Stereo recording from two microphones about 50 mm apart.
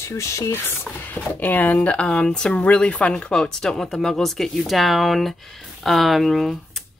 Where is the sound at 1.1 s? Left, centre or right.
Left.